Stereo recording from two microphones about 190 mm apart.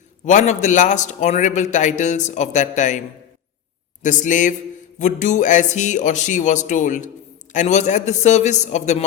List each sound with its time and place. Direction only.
0.3 s a man's voice: 40° left (ahead or behind)
4.0 s a man's voice: 40° left (ahead or behind)